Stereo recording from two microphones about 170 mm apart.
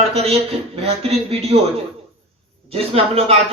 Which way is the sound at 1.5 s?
35° right (ahead or behind).